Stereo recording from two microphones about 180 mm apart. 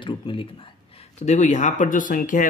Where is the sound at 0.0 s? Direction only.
30° left (ahead or behind).